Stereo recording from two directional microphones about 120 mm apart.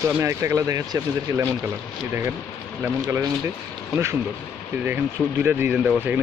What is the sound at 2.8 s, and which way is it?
Speech, 15° right (ahead or behind).